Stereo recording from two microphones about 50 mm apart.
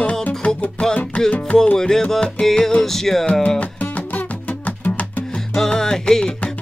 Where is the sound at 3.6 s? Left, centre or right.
Left.